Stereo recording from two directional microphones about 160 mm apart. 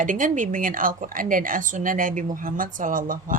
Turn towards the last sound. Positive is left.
turn(degrees=-60)  # may be behind; listen again after turning